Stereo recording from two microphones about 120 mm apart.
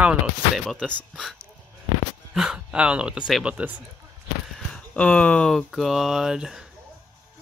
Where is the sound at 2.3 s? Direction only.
5° right (ahead or behind).